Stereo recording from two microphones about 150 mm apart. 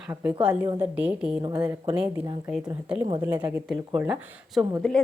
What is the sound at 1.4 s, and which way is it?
Speech, 25° right (ahead or behind).